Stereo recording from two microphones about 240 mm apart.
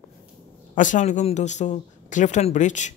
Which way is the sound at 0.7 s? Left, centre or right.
Left.